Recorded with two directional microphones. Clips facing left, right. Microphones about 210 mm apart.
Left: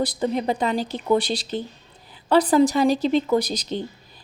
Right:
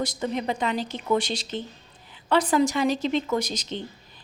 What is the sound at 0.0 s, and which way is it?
A woman's voice, 35° left (ahead or behind).